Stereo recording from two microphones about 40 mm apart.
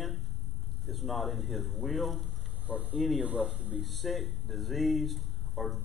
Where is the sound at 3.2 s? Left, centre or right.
Right.